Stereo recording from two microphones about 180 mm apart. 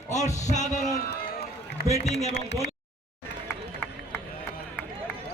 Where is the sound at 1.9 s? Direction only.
35° left (ahead or behind).